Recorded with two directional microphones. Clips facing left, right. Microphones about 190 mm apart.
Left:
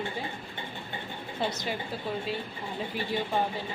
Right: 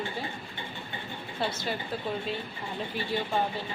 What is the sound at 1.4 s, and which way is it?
Speech, 15° left (ahead or behind).